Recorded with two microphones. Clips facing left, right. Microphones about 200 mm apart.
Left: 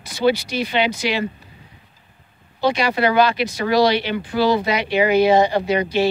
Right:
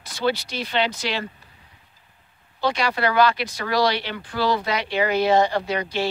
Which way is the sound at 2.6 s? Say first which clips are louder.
Left 4 dB; 15° left (ahead or behind).